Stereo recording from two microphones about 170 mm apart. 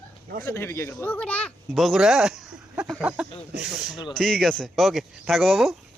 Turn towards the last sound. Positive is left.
turn(degrees=0)  # may be behind; listen again after turning